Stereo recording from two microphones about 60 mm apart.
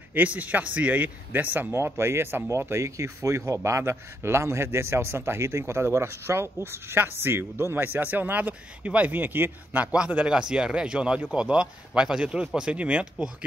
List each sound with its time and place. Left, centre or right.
0.1 s speech: right
2.0 s a man's voice: right
9.7 s speech: right